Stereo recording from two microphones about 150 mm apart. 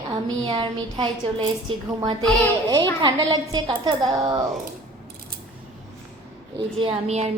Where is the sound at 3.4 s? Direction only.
30° right (ahead or behind).